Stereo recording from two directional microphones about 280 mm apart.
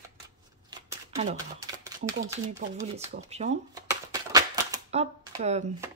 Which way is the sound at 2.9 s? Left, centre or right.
Right.